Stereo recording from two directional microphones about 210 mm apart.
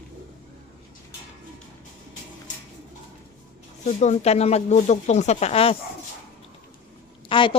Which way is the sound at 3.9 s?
35° left (ahead or behind).